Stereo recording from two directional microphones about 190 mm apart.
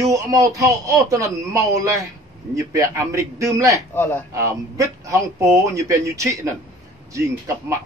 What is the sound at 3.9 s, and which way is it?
Speech, 10° left (ahead or behind).